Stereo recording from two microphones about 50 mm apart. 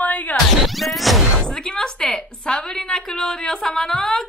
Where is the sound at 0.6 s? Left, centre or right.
Centre.